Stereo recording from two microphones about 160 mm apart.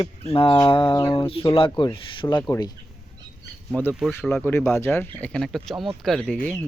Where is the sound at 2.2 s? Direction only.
20° left (ahead or behind).